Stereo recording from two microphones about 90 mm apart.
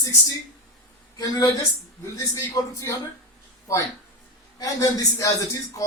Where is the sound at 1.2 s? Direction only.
45° left (ahead or behind).